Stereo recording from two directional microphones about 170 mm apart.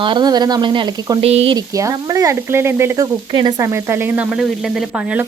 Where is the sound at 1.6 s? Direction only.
20° right (ahead or behind).